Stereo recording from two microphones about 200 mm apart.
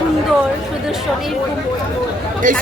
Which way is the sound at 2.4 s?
40° right (ahead or behind).